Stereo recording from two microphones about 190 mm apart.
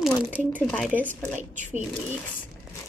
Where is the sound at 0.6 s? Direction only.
5° left (ahead or behind).